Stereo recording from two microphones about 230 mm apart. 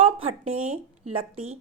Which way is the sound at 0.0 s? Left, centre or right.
Right.